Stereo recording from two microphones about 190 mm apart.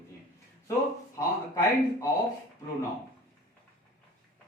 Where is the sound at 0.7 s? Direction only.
15° left (ahead or behind).